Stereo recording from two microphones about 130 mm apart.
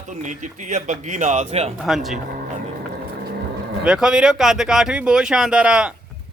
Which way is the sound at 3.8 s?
5° right (ahead or behind).